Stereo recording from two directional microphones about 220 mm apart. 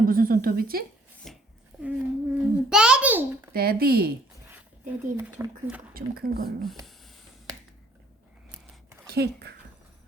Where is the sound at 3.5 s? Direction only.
45° right (ahead or behind).